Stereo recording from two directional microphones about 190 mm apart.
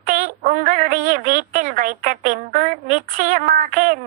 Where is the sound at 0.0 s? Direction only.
45° right (ahead or behind).